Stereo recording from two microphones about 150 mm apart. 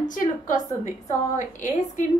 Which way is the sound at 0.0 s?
60° left (ahead or behind).